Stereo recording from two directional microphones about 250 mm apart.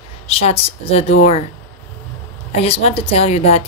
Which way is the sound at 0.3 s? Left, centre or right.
Left.